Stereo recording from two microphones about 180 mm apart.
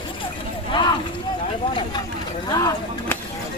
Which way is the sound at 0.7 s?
25° left (ahead or behind).